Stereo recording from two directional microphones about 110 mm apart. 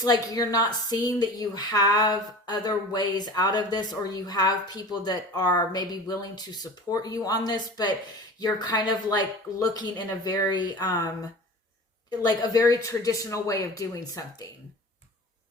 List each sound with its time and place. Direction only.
0.0 s a woman's voice: 35° left (ahead or behind)